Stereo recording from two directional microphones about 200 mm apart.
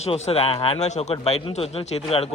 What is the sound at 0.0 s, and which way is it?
Speech, 30° left (ahead or behind).